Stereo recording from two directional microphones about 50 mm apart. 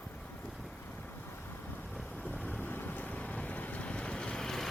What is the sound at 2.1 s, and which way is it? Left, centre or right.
Vehicle, left.